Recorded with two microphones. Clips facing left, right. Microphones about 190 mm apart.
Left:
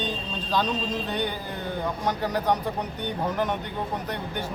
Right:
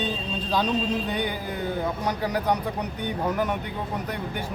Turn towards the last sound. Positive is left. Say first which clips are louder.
# right 1 dB
turn(degrees=-10)  # may be behind; listen again after turning